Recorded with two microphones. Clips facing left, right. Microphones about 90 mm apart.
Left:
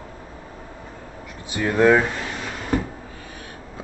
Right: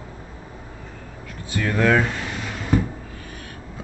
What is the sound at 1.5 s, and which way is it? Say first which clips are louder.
Speech: left 3 dB; 20° left (ahead or behind).